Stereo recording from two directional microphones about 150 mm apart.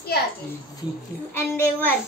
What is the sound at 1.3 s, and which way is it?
Speech, 10° left (ahead or behind).